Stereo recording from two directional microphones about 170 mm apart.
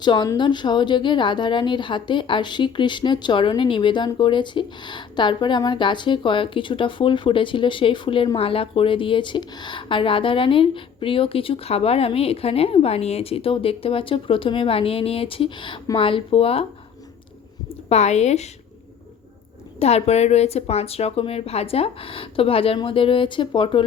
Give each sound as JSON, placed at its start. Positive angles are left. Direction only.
{"t": 0.0, "sound": "a woman's voice", "side_deg": 25}
{"t": 17.8, "sound": "speech", "side_deg": 40}
{"t": 19.8, "sound": "speech", "side_deg": 40}